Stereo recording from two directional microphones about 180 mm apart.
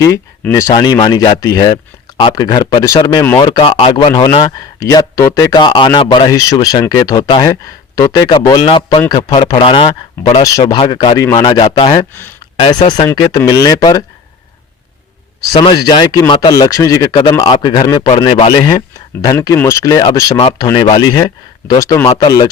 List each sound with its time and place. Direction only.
0.5 s speech: 20° left (ahead or behind)
15.5 s speech: 25° left (ahead or behind)